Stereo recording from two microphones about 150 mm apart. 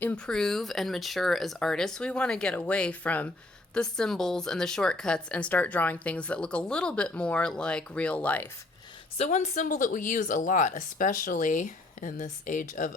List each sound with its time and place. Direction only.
0.0 s speech: 5° left (ahead or behind)
9.1 s speech: 45° left (ahead or behind); by 12.9 s 60° left (ahead or behind)